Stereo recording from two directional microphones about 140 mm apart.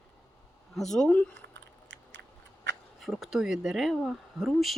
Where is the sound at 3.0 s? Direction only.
Centre (ahead or behind).